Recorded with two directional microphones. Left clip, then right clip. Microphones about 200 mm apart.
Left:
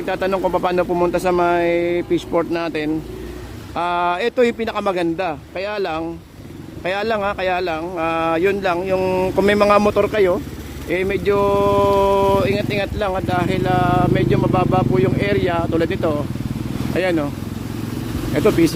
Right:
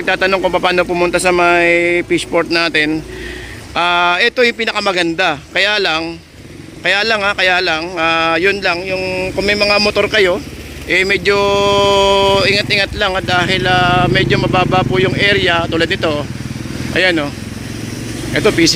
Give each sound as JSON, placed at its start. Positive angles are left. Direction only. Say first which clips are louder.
{"t": 0.0, "sound": "speech", "louder": "right 6 dB", "side_deg": 5}
{"t": 8.9, "sound": "a sound", "louder": "even", "side_deg": 30}
{"t": 9.8, "sound": "speech", "louder": "right 4 dB", "side_deg": 10}
{"t": 18.3, "sound": "speech", "louder": "right 4 dB", "side_deg": 10}